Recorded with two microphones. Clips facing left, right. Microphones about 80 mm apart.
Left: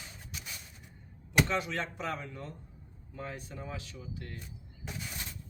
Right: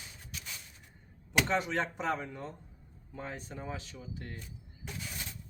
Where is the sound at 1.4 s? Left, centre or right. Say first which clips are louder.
Right 2 dB; right.